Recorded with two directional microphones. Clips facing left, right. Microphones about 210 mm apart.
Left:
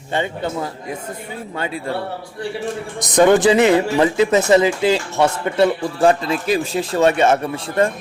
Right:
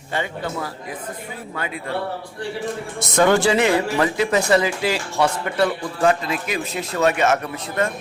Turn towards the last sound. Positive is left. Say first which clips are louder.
# left 5 dB
turn(degrees=30)  # may be behind; listen again after turning